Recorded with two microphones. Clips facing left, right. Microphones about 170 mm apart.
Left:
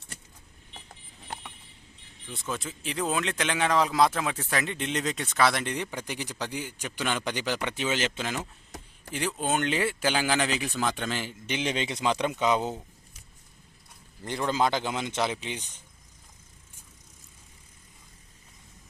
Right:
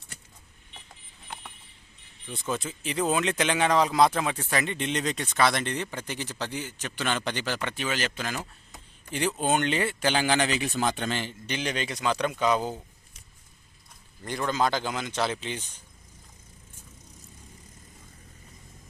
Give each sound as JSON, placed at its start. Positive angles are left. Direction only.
{"t": 2.3, "sound": "speech", "side_deg": 0}
{"t": 9.1, "sound": "speech", "side_deg": 0}
{"t": 14.3, "sound": "a man's voice", "side_deg": 25}